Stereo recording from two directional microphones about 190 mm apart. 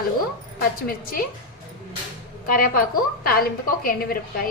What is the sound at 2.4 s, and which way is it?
A woman's voice, 45° left (ahead or behind).